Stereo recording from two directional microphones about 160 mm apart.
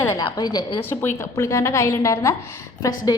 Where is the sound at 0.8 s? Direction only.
15° left (ahead or behind).